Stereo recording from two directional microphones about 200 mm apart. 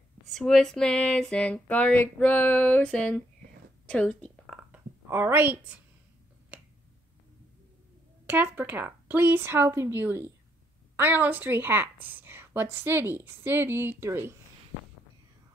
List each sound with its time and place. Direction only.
0.3 s a sound: centre (ahead or behind)
4.7 s speech: 10° right (ahead or behind)
8.3 s a woman's voice: 10° right (ahead or behind)